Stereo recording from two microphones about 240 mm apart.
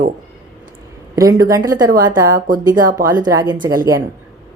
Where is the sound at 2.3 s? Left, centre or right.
Right.